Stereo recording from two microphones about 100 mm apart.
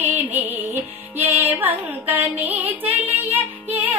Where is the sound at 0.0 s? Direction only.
15° right (ahead or behind).